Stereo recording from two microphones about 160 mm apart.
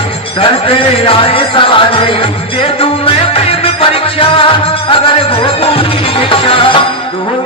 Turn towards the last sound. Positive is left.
turn(degrees=35)  # may be behind; listen again after turning